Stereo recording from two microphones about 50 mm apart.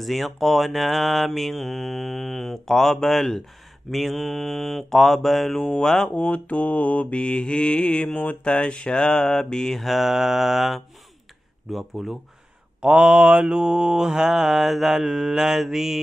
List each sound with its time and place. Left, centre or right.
0.0 s mantra: centre
6.1 s mantra: left; by 12.2 s centre
12.8 s mantra: centre